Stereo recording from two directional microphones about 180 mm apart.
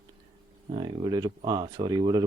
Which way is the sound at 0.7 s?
25° right (ahead or behind).